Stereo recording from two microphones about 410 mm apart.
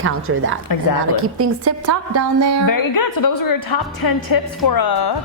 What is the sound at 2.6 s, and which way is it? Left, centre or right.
A woman's voice, left.